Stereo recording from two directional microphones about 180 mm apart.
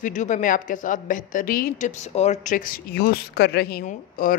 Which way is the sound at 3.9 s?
50° left (ahead or behind).